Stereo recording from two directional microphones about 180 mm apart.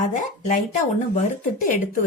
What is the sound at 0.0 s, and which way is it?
Speech, 45° left (ahead or behind).